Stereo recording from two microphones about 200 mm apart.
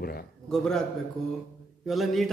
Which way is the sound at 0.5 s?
Centre (ahead or behind).